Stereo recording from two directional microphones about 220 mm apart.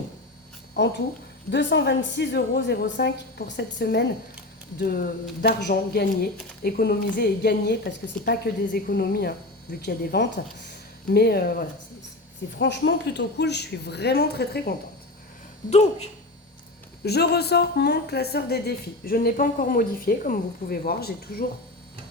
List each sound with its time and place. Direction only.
0.8 s a woman's voice: 50° left (ahead or behind)
12.5 s a woman's voice: 50° left (ahead or behind)
15.7 s speech: 30° left (ahead or behind)
17.0 s a woman's voice: 45° left (ahead or behind)